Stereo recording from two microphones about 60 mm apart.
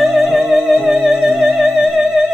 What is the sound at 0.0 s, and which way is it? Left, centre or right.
Music, centre.